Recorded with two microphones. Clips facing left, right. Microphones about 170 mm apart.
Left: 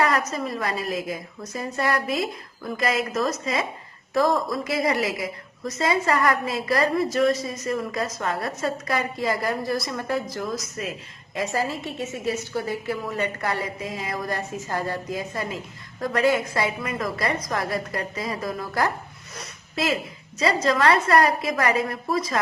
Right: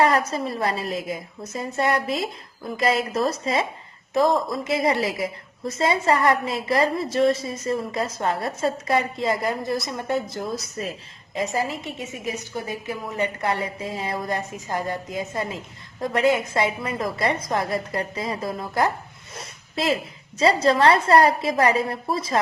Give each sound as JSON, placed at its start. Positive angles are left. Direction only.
{"t": 0.0, "sound": "a woman's voice", "side_deg": -30}
{"t": 11.3, "sound": "a woman's voice", "side_deg": -20}
{"t": 19.4, "sound": "a sound", "side_deg": -30}
{"t": 20.4, "sound": "a woman's voice", "side_deg": -30}